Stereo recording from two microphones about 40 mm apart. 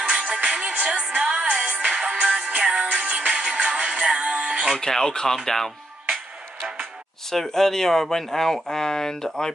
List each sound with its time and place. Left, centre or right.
0.0 s music: right
4.7 s speech: centre
7.2 s speech: centre